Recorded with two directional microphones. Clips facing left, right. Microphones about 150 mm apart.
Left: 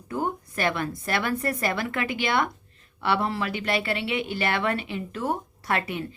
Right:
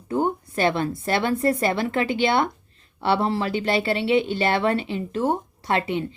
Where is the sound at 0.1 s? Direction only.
25° right (ahead or behind).